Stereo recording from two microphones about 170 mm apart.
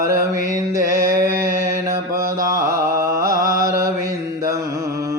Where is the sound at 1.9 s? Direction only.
20° right (ahead or behind).